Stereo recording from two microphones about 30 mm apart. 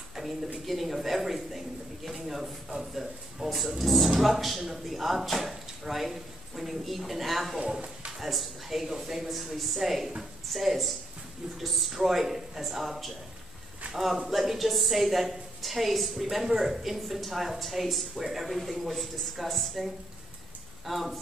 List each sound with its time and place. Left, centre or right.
0.7 s speech: centre
3.4 s speech: centre
11.9 s speech: centre